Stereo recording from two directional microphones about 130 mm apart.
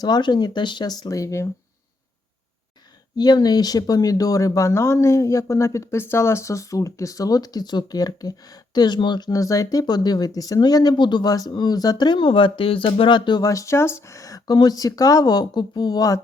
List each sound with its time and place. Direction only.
0.0 s speech: 35° left (ahead or behind)
3.2 s speech: 30° left (ahead or behind)